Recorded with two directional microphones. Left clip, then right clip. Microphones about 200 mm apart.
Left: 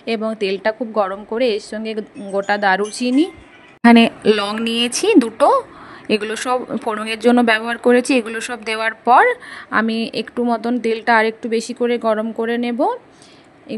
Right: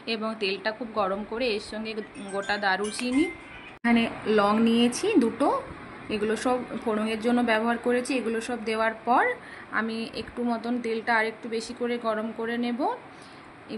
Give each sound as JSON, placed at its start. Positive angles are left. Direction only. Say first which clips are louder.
{"t": 0.0, "sound": "speech", "louder": "left 8 dB", "side_deg": 40}
{"t": 3.9, "sound": "speech", "louder": "left 10 dB", "side_deg": 55}